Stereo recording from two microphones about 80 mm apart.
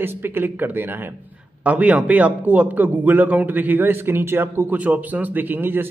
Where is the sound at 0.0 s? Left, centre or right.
Right.